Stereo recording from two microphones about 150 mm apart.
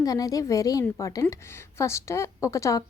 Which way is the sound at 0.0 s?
25° left (ahead or behind).